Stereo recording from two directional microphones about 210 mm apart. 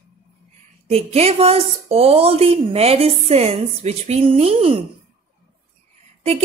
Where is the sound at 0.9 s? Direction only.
30° right (ahead or behind).